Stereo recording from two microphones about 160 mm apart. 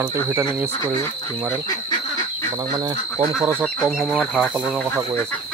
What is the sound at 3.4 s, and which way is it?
Speech, 15° right (ahead or behind).